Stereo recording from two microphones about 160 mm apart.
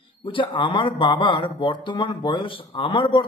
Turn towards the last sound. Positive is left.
turn(degrees=30)  # may be behind; listen again after turning